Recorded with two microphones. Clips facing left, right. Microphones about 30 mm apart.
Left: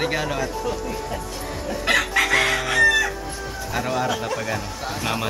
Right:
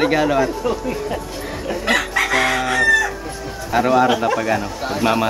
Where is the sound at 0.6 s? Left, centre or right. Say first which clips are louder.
Right 5 dB; right.